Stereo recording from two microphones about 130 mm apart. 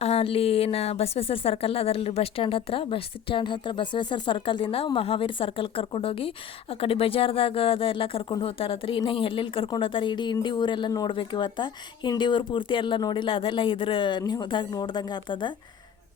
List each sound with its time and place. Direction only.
0.0 s a woman's voice: 50° left (ahead or behind)